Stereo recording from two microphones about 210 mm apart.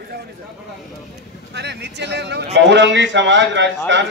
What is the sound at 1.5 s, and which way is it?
A man's voice, 55° right (ahead or behind).